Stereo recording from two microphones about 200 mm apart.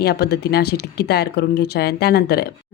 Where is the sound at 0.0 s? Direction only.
55° left (ahead or behind).